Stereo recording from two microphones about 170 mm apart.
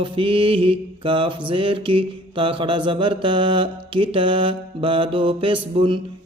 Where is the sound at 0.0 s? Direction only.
30° right (ahead or behind).